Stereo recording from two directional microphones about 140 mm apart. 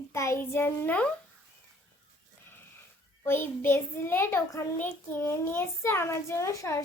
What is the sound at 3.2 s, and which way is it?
A child's voice, 15° left (ahead or behind).